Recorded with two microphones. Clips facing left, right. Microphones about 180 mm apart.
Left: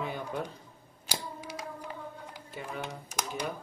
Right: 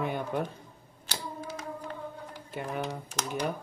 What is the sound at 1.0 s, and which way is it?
Computer keyboard, 15° left (ahead or behind).